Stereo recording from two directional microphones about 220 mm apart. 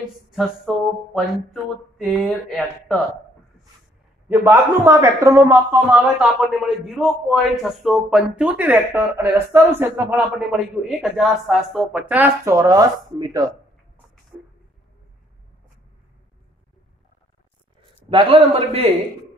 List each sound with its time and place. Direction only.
1.1 s speech: centre (ahead or behind)
4.3 s a man's voice: 10° right (ahead or behind)
18.1 s a man's voice: 25° right (ahead or behind)